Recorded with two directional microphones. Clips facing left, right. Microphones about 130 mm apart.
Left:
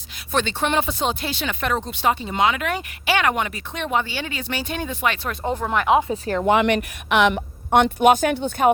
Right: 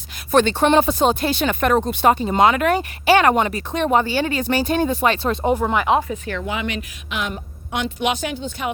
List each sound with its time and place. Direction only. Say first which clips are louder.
0.3 s speech: right 7 dB; 45° right (ahead or behind); by 5.5 s 25° right (ahead or behind)
5.5 s speech: right 1 dB; 5° right (ahead or behind)
6.2 s speech: left 5 dB; 40° left (ahead or behind)
6.5 s a woman's voice: left 8 dB; 60° left (ahead or behind)